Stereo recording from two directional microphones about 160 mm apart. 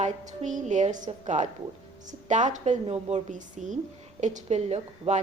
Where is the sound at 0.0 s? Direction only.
50° right (ahead or behind).